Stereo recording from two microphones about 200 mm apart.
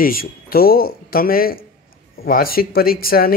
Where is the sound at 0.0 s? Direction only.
45° left (ahead or behind).